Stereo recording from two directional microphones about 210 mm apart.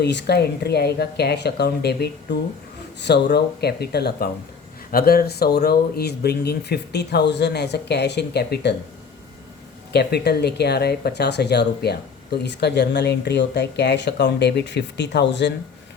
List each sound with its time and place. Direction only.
0.0 s speech: 55° left (ahead or behind)
9.9 s speech: 50° left (ahead or behind)